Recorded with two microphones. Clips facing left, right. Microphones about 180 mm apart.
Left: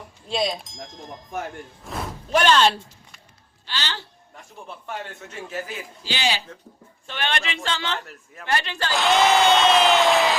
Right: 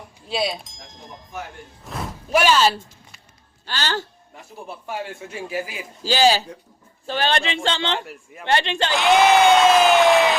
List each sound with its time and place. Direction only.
0.3 s applause: 5° right (ahead or behind)
1.9 s a sound: 5° right (ahead or behind)
3.7 s speech: 45° right (ahead or behind)
4.4 s a man's voice: 5° right (ahead or behind)
6.0 s a man's voice: 40° right (ahead or behind); by 9.0 s 25° right (ahead or behind)
9.0 s applause: centre (ahead or behind)